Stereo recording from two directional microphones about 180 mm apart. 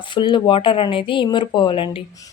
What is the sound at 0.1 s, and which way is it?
Speech, 25° left (ahead or behind).